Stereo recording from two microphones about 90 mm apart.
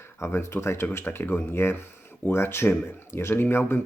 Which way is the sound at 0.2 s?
30° left (ahead or behind).